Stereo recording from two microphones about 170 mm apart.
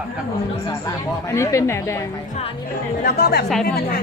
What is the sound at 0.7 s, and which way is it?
Speech, 20° left (ahead or behind).